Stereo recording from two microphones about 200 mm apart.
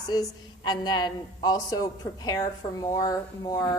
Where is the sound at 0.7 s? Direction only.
20° left (ahead or behind).